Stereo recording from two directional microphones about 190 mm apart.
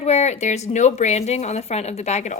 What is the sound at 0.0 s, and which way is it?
Speech, 35° left (ahead or behind).